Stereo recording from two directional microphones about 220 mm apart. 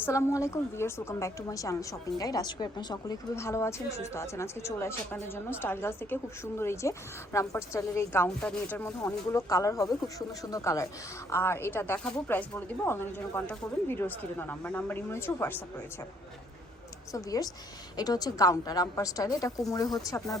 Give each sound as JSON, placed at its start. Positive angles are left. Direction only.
{"t": 0.0, "sound": "a woman's voice", "side_deg": 15}
{"t": 17.1, "sound": "a woman's voice", "side_deg": 15}